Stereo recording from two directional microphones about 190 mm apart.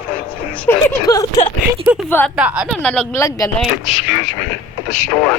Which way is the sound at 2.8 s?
5° left (ahead or behind).